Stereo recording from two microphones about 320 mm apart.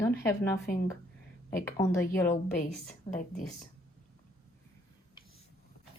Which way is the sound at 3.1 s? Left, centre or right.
Left.